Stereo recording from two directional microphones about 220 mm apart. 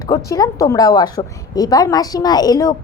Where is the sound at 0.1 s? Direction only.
15° left (ahead or behind).